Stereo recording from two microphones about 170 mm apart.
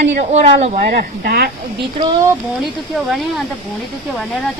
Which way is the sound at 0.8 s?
70° right (ahead or behind).